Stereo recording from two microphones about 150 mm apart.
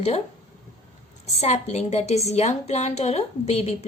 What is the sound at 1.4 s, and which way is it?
A woman's voice, 45° left (ahead or behind).